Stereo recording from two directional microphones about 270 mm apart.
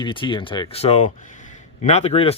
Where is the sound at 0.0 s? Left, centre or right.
Centre.